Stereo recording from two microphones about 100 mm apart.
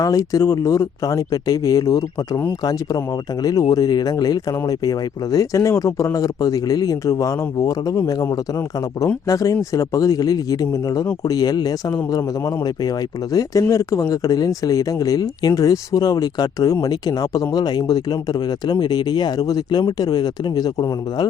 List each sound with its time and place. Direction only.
0.0 s speech: 35° left (ahead or behind)
3.4 s speech: 40° left (ahead or behind)
13.3 s speech: 35° left (ahead or behind)